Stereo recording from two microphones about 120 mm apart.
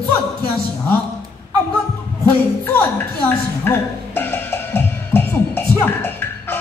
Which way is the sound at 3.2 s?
15° left (ahead or behind).